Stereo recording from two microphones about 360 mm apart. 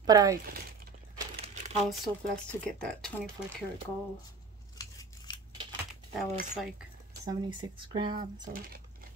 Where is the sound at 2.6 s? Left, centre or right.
Centre.